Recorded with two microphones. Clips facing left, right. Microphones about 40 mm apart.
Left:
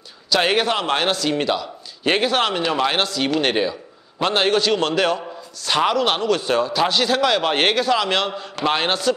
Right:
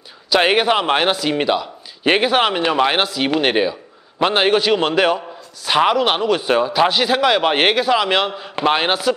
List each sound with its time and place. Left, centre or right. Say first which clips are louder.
0.3 s a man's voice: right 4 dB; centre